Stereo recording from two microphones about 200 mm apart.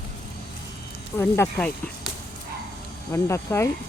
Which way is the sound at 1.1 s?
10° left (ahead or behind).